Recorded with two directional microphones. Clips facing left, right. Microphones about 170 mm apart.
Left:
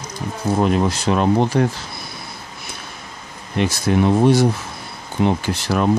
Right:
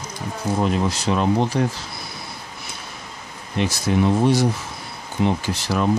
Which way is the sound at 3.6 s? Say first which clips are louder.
Left 3 dB; 60° left (ahead or behind).